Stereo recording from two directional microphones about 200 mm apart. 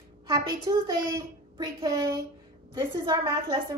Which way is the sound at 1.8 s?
15° right (ahead or behind).